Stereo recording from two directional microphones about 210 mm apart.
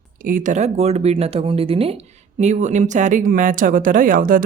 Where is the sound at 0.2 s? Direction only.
40° right (ahead or behind).